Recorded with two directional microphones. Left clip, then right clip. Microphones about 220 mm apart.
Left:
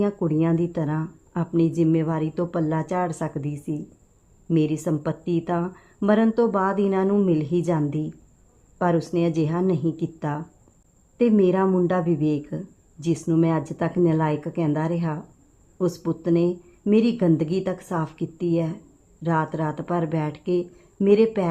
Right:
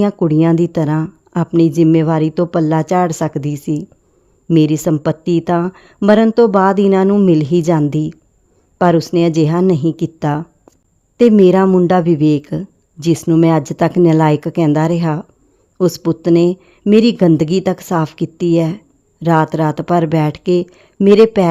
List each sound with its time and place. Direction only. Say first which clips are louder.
0.0 s speech: right 10 dB; 45° right (ahead or behind)